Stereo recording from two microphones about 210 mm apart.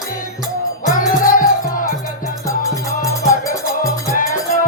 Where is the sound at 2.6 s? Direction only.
15° left (ahead or behind).